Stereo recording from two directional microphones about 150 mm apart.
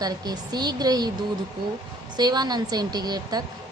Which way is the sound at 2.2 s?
25° right (ahead or behind).